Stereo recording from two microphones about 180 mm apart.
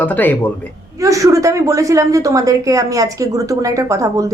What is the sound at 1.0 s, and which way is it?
A woman's voice, 15° right (ahead or behind).